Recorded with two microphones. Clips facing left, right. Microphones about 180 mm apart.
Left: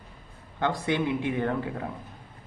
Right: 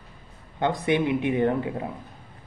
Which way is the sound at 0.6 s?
20° right (ahead or behind).